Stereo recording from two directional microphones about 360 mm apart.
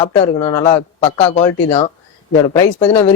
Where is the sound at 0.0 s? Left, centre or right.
Centre.